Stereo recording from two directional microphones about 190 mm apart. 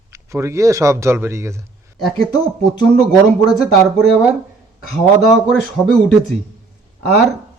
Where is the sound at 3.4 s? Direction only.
Centre (ahead or behind).